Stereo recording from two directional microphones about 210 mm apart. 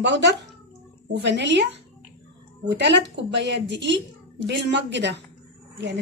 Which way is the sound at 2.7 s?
55° right (ahead or behind).